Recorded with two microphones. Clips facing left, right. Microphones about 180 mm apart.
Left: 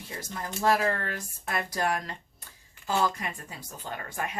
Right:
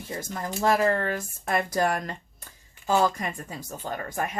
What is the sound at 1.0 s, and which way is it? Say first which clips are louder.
Speech: right 6 dB; 50° right (ahead or behind).